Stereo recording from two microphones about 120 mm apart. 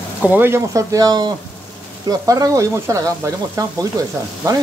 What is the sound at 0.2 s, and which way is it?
Speech, 15° right (ahead or behind).